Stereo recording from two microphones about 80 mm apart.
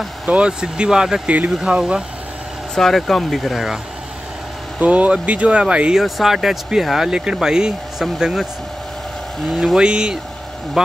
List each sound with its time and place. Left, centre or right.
0.3 s speech: centre
2.7 s speech: centre
4.7 s speech: centre
9.5 s speech: centre